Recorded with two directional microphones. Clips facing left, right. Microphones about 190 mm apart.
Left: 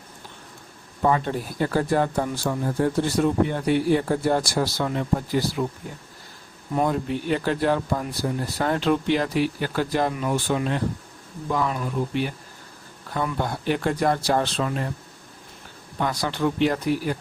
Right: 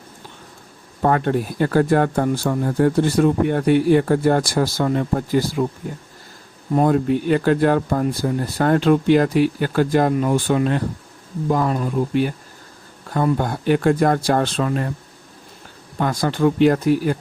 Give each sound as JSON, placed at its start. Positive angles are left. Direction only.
{"t": 1.0, "sound": "speech", "side_deg": -60}
{"t": 6.8, "sound": "speech", "side_deg": -50}
{"t": 16.0, "sound": "speech", "side_deg": -50}